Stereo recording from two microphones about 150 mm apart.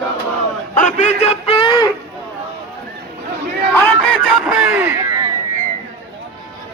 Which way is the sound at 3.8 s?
5° left (ahead or behind).